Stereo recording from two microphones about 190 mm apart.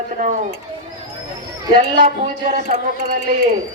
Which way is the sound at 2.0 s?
45° right (ahead or behind).